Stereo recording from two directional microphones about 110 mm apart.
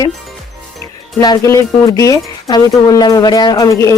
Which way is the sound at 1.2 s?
35° left (ahead or behind).